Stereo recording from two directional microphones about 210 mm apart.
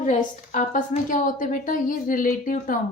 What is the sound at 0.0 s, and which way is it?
A woman's voice, 35° left (ahead or behind).